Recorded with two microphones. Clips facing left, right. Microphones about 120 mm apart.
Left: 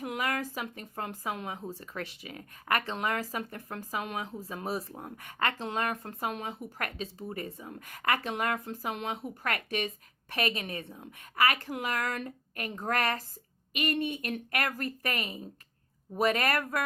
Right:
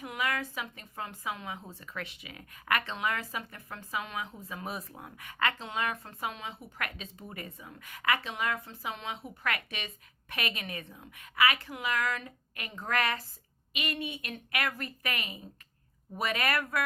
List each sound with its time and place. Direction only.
0.0 s speech: 45° left (ahead or behind)
11.3 s speech: 45° left (ahead or behind)